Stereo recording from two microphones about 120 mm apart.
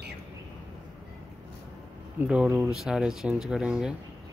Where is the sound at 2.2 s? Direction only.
10° right (ahead or behind).